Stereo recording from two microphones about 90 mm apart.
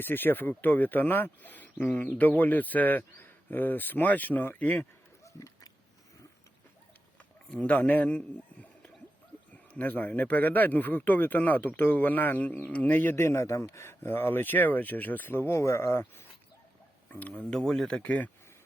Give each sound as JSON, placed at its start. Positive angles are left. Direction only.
{"t": 0.0, "sound": "speech", "side_deg": 20}
{"t": 5.2, "sound": "pig", "side_deg": 35}
{"t": 7.5, "sound": "speech", "side_deg": 15}
{"t": 17.1, "sound": "speech", "side_deg": 15}